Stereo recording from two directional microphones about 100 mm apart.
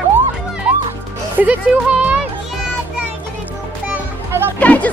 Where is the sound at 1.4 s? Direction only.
15° right (ahead or behind).